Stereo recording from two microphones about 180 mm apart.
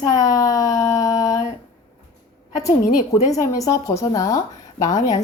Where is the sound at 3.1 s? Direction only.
20° left (ahead or behind).